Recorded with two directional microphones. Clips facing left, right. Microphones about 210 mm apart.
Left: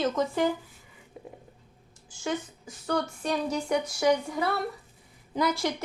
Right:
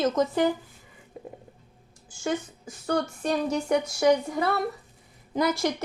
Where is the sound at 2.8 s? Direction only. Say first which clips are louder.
Right 2 dB; 45° right (ahead or behind).